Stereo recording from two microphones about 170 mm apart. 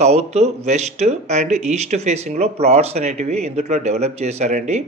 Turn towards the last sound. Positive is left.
turn(degrees=-45)  # may be behind; listen again after turning